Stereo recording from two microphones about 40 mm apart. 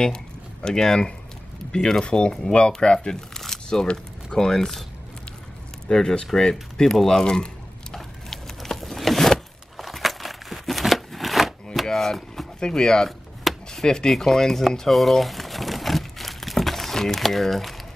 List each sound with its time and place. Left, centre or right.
0.0 s speech: centre
2.0 s speech: left; by 4.8 s centre
5.9 s speech: centre
6.5 s speech: centre
7.9 s a sound: centre
12.5 s speech: centre
14.9 s crumpling: centre